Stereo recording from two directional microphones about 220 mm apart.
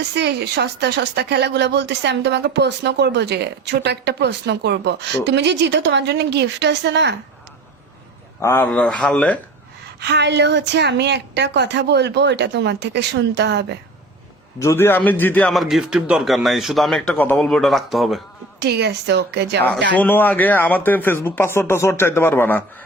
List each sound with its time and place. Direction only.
0.1 s speech: 50° right (ahead or behind)
8.4 s speech: 10° left (ahead or behind)
10.1 s speech: 50° right (ahead or behind)
14.6 s a man's voice: 10° left (ahead or behind)
18.6 s speech: 50° right (ahead or behind)
19.9 s speech: 10° left (ahead or behind)